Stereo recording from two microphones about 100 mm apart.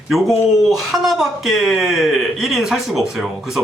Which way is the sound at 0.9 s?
Centre (ahead or behind).